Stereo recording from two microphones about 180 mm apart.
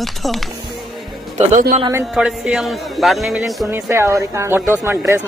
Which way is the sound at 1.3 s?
45° right (ahead or behind).